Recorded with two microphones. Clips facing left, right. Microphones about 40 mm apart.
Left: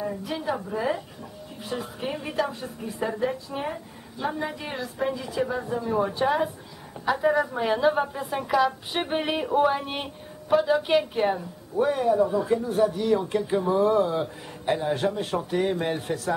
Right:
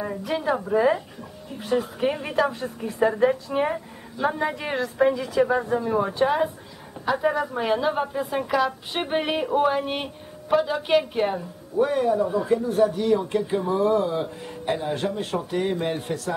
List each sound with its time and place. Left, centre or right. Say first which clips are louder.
0.4 s a woman's voice: right 8 dB; centre
1.6 s a woman's voice: right 8 dB; centre
5.1 s speech: right 5 dB; centre
5.4 s speech: right 6 dB; right; by 16.3 s centre